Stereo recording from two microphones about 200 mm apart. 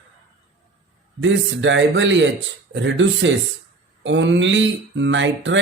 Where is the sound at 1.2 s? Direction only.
65° right (ahead or behind).